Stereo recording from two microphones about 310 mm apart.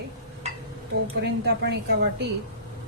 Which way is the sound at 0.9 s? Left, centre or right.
Right.